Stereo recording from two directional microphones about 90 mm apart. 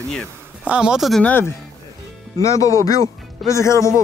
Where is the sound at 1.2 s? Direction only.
20° left (ahead or behind).